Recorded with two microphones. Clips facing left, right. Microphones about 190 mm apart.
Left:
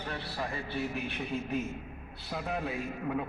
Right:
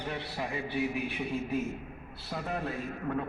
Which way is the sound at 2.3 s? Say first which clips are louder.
Even; centre (ahead or behind).